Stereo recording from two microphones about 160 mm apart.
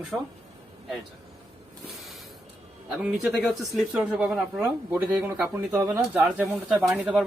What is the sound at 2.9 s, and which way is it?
Speech, centre (ahead or behind).